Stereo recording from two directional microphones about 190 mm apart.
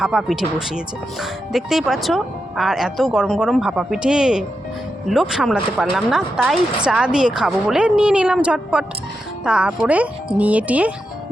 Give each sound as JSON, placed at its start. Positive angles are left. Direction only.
{"t": 0.0, "sound": "speech", "side_deg": 0}